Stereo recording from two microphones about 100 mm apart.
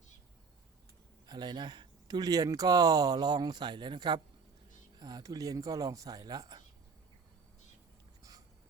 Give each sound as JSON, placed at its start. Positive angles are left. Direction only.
{"t": 1.3, "sound": "speech", "side_deg": -45}